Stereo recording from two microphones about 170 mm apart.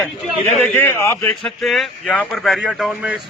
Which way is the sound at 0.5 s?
5° left (ahead or behind).